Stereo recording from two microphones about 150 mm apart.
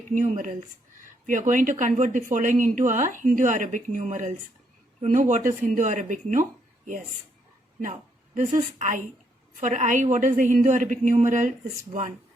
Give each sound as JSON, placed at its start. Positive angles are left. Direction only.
{"t": 0.1, "sound": "speech", "side_deg": -55}
{"t": 8.4, "sound": "speech", "side_deg": -55}